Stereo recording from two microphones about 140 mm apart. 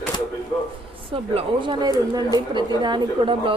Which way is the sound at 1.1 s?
40° right (ahead or behind).